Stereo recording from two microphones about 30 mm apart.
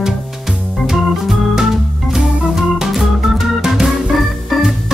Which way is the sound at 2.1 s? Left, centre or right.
Centre.